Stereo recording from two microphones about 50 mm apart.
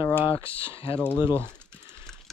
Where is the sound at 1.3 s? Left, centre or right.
Right.